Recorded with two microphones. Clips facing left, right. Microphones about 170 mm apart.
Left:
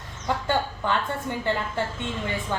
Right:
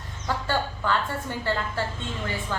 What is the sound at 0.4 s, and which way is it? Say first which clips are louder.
A woman's voice: left 1 dB; 20° left (ahead or behind).